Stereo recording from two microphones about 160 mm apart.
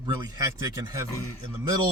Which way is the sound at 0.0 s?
25° right (ahead or behind).